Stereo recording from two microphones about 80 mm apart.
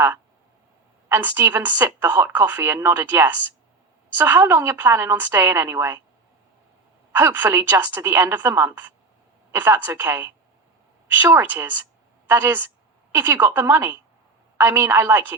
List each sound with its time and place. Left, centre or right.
1.0 s a woman's voice: right
7.1 s a woman's voice: right
11.5 s a woman's voice: right